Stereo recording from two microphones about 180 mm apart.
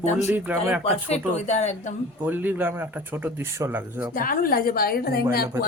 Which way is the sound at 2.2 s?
10° right (ahead or behind).